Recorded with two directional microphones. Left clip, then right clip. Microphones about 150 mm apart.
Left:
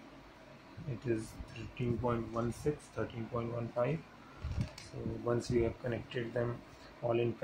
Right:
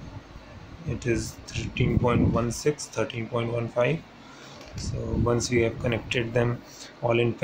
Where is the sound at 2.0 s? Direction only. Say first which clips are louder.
Right 11 dB; 10° right (ahead or behind).